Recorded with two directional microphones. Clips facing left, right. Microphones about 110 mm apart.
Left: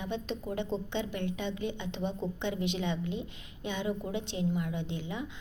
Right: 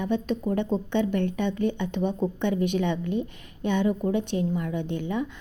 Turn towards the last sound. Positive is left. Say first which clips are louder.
# right 8 dB
turn(degrees=-55)  # may be behind; listen again after turning